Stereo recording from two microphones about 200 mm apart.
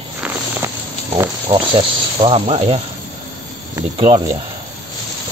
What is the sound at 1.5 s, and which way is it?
Speech, 25° right (ahead or behind).